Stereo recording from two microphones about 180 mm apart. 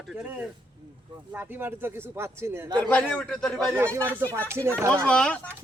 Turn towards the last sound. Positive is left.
turn(degrees=5)  # may be behind; listen again after turning